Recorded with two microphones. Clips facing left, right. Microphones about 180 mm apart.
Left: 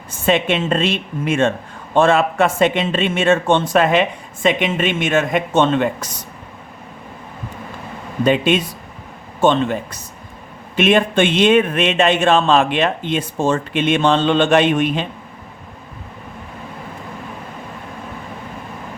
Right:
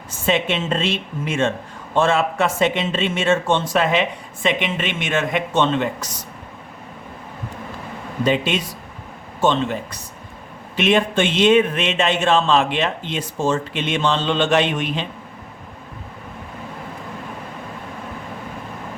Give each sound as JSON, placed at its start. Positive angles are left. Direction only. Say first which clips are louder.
{"t": 0.3, "sound": "speech", "louder": "left 4 dB", "side_deg": 55}
{"t": 8.2, "sound": "speech", "louder": "left 4 dB", "side_deg": 55}